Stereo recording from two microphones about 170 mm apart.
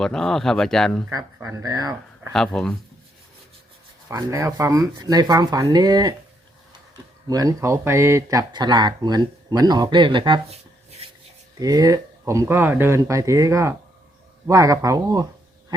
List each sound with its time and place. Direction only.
0.0 s speech: 5° left (ahead or behind)
1.1 s speech: 20° right (ahead or behind)
2.3 s speech: 5° left (ahead or behind)
4.1 s speech: 20° right (ahead or behind)
7.3 s speech: 20° right (ahead or behind); by 11.1 s 35° right (ahead or behind)
11.6 s speech: 20° right (ahead or behind)